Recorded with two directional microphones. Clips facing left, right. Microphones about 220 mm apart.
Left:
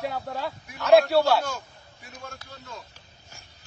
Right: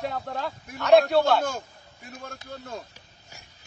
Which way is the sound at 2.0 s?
55° right (ahead or behind).